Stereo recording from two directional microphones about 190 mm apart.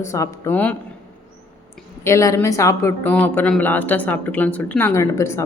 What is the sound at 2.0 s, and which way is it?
A woman's voice, 15° left (ahead or behind).